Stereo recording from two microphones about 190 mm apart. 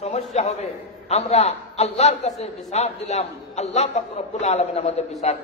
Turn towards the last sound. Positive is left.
turn(degrees=35)  # may be behind; listen again after turning